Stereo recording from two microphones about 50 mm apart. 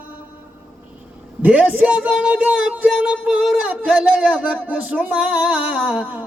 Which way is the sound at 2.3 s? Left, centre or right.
Right.